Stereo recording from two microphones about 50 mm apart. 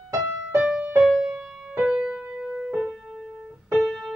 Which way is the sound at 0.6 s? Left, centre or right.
Right.